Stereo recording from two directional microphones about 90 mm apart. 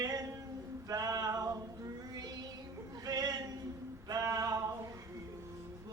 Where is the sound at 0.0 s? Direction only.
40° right (ahead or behind).